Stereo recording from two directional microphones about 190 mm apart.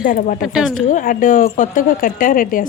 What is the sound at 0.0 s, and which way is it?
A woman's voice, 45° left (ahead or behind).